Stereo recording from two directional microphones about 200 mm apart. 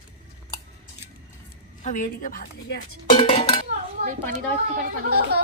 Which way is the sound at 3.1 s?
25° left (ahead or behind).